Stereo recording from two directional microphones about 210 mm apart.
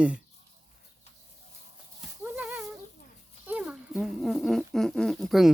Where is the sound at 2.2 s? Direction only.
5° right (ahead or behind).